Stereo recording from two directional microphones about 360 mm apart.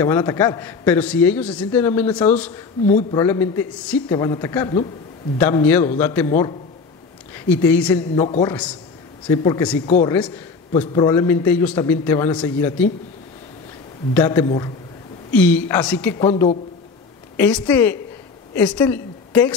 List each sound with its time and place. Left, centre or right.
0.0 s a man's voice: centre
2.9 s a man's voice: centre
9.8 s speech: centre
10.1 s a man's voice: centre
14.1 s a man's voice: centre